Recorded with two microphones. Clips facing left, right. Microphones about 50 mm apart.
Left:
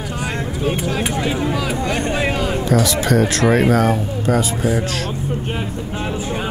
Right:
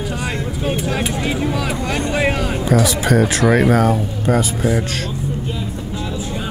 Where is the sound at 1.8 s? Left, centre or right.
Left.